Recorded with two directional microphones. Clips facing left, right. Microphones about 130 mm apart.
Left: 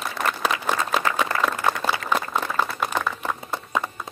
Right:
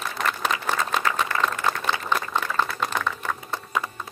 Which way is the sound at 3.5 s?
25° left (ahead or behind).